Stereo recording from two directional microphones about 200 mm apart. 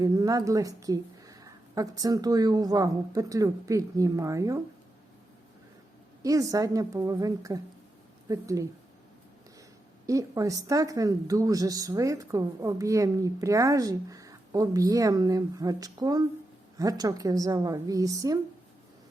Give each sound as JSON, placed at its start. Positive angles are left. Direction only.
{"t": 0.0, "sound": "a woman's voice", "side_deg": -20}
{"t": 6.2, "sound": "a woman's voice", "side_deg": -15}
{"t": 10.1, "sound": "a woman's voice", "side_deg": -15}